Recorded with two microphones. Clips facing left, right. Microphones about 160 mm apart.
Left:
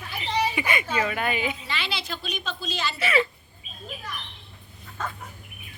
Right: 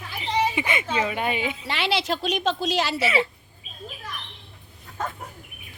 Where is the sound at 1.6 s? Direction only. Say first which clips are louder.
Right 7 dB; 75° right (ahead or behind).